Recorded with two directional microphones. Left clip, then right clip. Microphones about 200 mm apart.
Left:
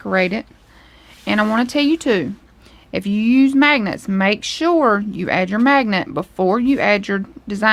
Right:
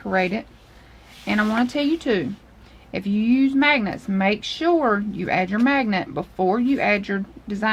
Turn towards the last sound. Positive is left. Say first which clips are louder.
# left 6 dB
turn(degrees=50)  # may be behind; listen again after turning